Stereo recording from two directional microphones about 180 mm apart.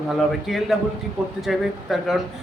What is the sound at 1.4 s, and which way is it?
Speech, centre (ahead or behind).